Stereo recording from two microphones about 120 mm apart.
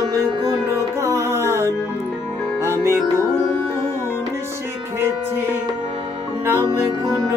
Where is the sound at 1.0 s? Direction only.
25° right (ahead or behind).